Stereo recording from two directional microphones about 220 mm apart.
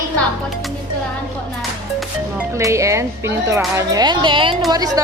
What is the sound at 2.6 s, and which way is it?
Speech, 15° right (ahead or behind).